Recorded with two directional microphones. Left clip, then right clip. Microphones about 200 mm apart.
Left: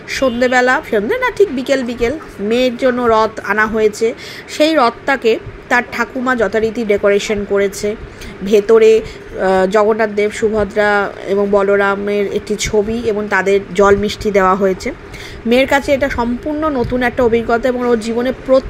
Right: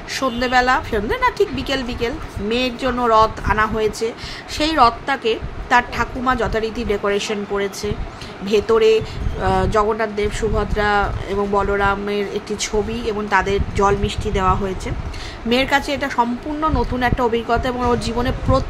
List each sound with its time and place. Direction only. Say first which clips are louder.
0.1 s speech: left 5 dB; 15° left (ahead or behind)